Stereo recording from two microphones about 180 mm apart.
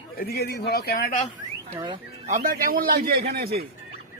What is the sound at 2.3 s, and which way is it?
A man's voice, 55° right (ahead or behind).